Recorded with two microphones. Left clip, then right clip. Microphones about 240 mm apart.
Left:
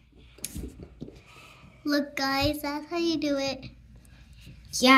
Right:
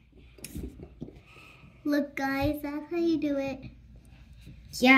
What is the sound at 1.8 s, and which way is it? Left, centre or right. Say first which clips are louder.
A child's voice: left 2 dB; centre.